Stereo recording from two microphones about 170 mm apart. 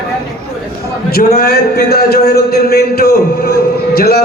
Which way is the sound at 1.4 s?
60° left (ahead or behind).